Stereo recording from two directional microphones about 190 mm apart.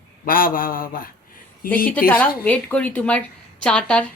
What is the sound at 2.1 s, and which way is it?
A woman's voice, 10° left (ahead or behind).